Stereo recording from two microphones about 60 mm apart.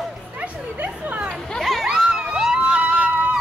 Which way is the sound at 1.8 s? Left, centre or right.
Centre.